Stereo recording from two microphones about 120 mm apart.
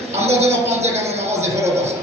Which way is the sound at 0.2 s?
60° right (ahead or behind).